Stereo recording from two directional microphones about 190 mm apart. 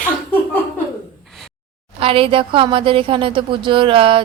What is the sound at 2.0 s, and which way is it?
A woman's voice, 30° right (ahead or behind).